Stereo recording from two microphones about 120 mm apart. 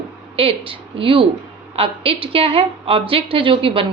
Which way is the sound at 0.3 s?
50° right (ahead or behind).